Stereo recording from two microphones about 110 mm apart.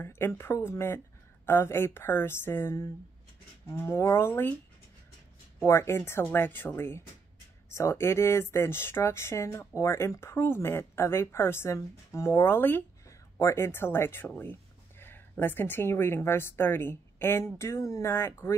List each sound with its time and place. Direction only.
0.0 s speech: 20° left (ahead or behind)
5.6 s a woman's voice: 25° left (ahead or behind)